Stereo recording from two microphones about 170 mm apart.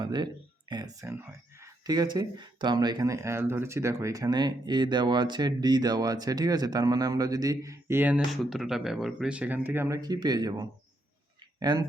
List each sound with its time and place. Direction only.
0.0 s speech: 25° right (ahead or behind)
1.0 s speech: 15° right (ahead or behind)